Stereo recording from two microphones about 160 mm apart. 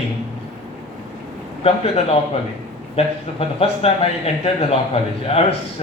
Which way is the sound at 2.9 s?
40° left (ahead or behind).